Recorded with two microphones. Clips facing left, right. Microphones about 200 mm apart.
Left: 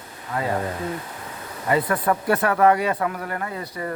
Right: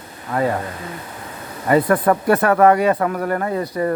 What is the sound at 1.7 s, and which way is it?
Speech, 50° right (ahead or behind).